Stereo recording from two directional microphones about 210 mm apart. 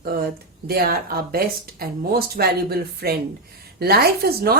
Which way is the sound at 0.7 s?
45° right (ahead or behind).